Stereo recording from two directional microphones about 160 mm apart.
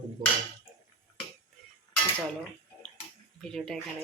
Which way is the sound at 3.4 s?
5° left (ahead or behind).